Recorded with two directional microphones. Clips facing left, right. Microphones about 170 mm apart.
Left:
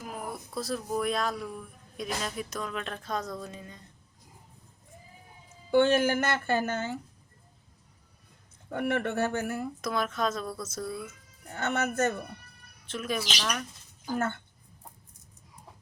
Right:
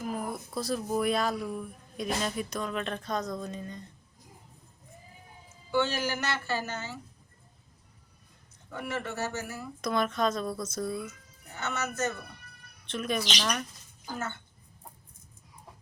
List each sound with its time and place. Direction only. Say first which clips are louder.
0.0 s speech: right 4 dB; centre (ahead or behind)
5.7 s speech: left 6 dB; 55° left (ahead or behind)
8.7 s a man's voice: left 6 dB; 55° left (ahead or behind)
9.8 s speech: right 3 dB; 5° left (ahead or behind)
11.5 s a man's voice: left 5 dB; 55° left (ahead or behind)
12.8 s speech: right 1 dB; 5° left (ahead or behind)